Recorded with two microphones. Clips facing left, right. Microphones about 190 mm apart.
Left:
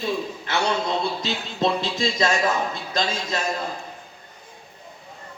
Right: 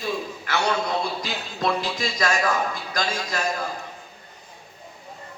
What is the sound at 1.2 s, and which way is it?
A man's voice, 25° left (ahead or behind).